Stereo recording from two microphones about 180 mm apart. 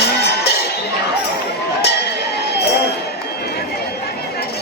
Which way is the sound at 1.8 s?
70° left (ahead or behind).